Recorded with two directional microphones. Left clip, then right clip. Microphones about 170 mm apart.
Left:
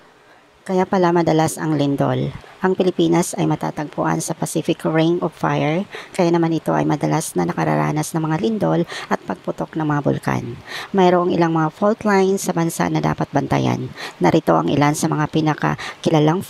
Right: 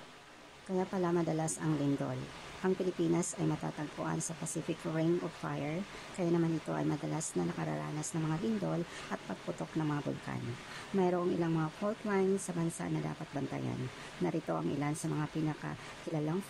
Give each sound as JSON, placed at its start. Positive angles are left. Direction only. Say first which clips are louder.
{"t": 0.7, "sound": "speech", "louder": "left 17 dB", "side_deg": 40}